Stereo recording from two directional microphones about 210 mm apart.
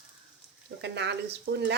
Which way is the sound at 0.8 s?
55° right (ahead or behind).